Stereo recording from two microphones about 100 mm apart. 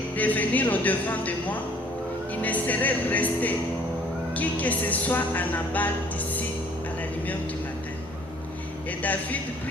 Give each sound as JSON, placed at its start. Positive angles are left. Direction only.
{"t": 0.2, "sound": "music", "side_deg": 15}